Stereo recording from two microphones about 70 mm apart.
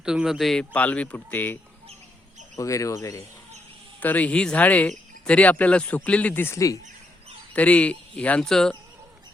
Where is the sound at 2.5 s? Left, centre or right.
Left.